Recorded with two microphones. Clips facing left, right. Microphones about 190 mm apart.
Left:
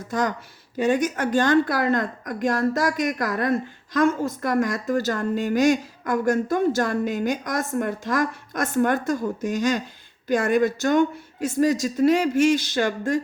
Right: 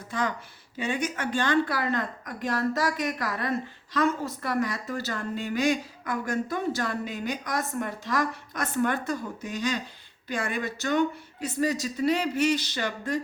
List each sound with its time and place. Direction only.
0.1 s a woman's voice: 45° left (ahead or behind)